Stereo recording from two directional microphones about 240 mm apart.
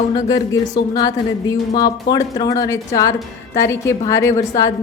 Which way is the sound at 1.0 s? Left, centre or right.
Centre.